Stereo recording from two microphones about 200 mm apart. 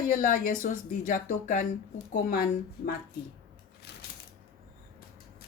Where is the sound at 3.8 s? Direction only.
55° left (ahead or behind).